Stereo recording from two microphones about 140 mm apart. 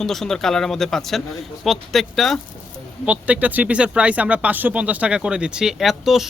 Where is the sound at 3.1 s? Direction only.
10° right (ahead or behind).